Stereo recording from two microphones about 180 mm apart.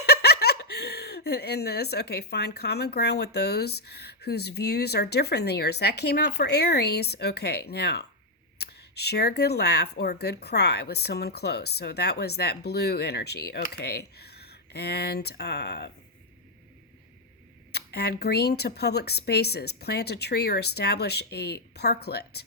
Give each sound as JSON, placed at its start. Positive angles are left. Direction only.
{"t": 0.0, "sound": "speech", "side_deg": 60}
{"t": 17.7, "sound": "speech", "side_deg": 65}